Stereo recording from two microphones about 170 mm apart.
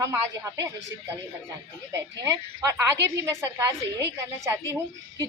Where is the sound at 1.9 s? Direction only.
20° right (ahead or behind).